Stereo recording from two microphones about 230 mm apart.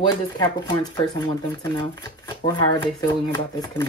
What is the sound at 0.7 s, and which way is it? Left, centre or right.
Speech, centre.